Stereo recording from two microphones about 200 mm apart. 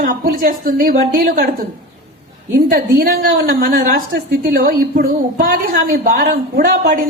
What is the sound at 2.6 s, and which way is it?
A woman's voice, 45° right (ahead or behind).